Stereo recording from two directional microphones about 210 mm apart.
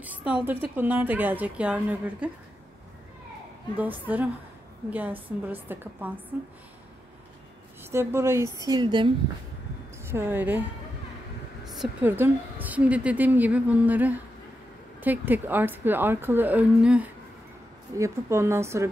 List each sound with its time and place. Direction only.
0.0 s a woman's voice: 5° right (ahead or behind)
3.7 s a woman's voice: 10° right (ahead or behind)
7.9 s a woman's voice: 10° right (ahead or behind)
10.0 s a woman's voice: 10° right (ahead or behind)
11.6 s a woman's voice: centre (ahead or behind)